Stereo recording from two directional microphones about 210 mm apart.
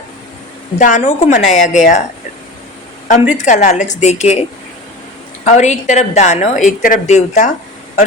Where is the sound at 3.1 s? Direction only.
35° left (ahead or behind).